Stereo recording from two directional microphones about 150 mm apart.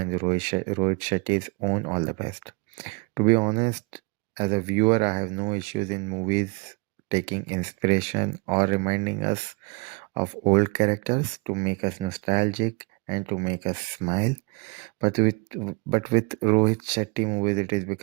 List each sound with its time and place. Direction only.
0.0 s speech: 35° right (ahead or behind)
11.4 s speech: 30° right (ahead or behind)